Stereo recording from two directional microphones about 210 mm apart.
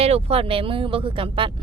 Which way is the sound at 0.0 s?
30° right (ahead or behind).